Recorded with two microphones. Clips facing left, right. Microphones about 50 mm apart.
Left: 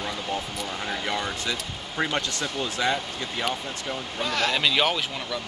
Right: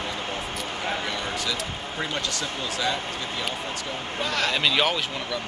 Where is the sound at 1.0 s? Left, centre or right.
Left.